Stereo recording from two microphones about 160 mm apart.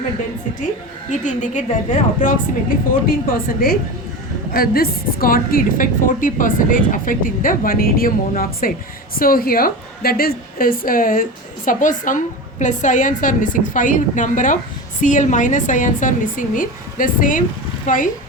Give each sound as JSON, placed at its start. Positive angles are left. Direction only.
{"t": 1.1, "sound": "a woman's voice", "side_deg": 50}